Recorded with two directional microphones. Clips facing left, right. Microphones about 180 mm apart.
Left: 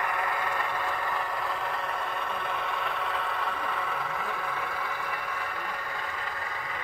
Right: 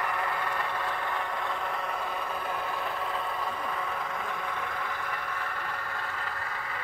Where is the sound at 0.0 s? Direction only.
10° left (ahead or behind).